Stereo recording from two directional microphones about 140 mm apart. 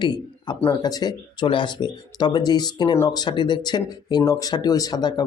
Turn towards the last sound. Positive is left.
turn(degrees=30)  # may be behind; listen again after turning